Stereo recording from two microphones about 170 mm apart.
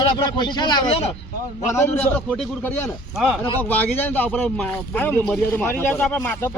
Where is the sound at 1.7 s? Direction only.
10° left (ahead or behind).